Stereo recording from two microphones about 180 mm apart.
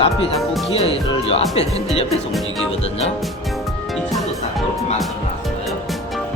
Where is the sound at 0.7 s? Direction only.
35° left (ahead or behind).